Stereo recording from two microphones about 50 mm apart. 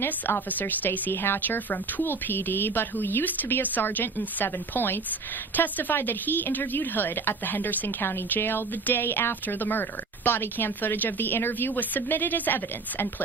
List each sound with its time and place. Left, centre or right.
0.0 s a woman's voice: left